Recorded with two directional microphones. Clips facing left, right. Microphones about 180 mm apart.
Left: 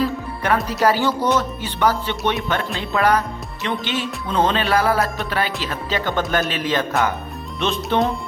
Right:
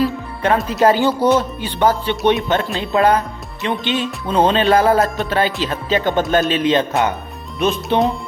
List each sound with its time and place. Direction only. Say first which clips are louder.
0.4 s music: right 4 dB; 20° right (ahead or behind)